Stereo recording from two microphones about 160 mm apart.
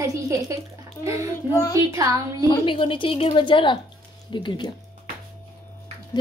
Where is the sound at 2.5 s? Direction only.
35° left (ahead or behind).